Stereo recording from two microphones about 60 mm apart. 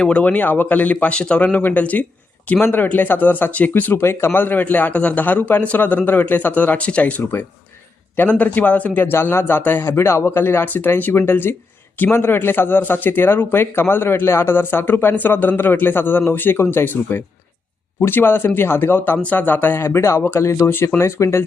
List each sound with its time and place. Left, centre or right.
0.0 s a man's voice: centre
4.0 s a man's voice: left